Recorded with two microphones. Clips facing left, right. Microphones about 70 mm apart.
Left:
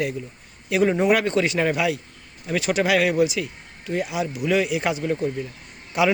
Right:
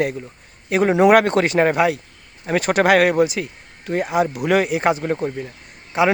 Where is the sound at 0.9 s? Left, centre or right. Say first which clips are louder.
Right 11 dB; right.